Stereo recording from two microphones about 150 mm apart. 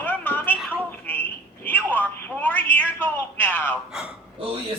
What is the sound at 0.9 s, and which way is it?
Telephone, 15° left (ahead or behind).